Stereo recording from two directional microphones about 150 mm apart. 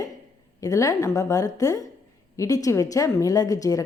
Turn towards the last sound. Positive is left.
turn(degrees=20)  # may be behind; listen again after turning